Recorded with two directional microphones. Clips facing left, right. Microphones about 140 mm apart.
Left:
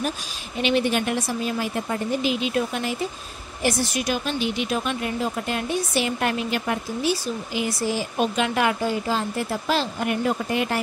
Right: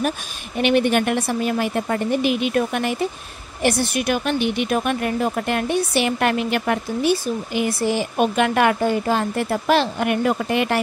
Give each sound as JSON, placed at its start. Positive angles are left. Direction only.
{"t": 0.6, "sound": "speech", "side_deg": -60}